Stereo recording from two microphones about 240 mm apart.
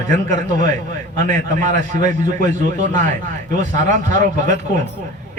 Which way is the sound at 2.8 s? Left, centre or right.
Right.